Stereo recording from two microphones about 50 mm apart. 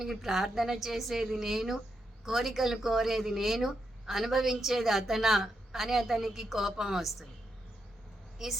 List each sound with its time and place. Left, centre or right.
0.0 s speech: centre
8.4 s a woman's voice: centre